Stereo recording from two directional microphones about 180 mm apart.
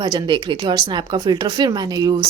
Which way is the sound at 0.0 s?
25° right (ahead or behind).